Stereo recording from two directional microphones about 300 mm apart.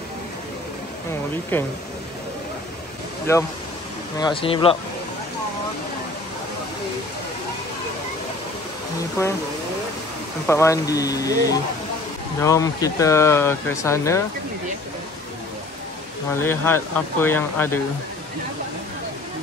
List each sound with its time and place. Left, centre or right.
1.5 s speech: centre
3.3 s speech: centre
9.2 s speech: centre
10.4 s speech: centre
16.3 s speech: centre